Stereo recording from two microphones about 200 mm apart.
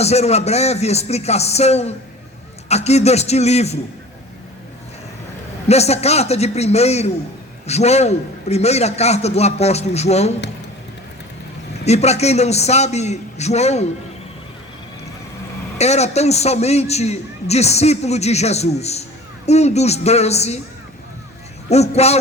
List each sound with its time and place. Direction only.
0.0 s a man's voice: 30° left (ahead or behind)
5.6 s a man's voice: 30° left (ahead or behind)
11.9 s a man's voice: 35° left (ahead or behind)
15.8 s a man's voice: 35° left (ahead or behind)
21.7 s a man's voice: 30° left (ahead or behind)